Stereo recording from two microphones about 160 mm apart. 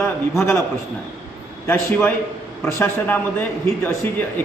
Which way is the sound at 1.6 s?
10° left (ahead or behind).